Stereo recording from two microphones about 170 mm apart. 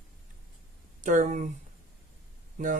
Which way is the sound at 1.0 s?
45° right (ahead or behind).